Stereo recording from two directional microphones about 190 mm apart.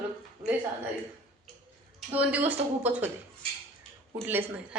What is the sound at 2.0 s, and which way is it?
A woman's voice, 10° right (ahead or behind).